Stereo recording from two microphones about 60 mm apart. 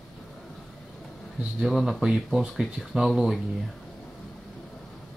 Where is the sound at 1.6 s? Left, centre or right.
Centre.